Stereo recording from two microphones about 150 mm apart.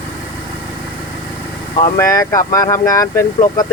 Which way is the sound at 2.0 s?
20° left (ahead or behind).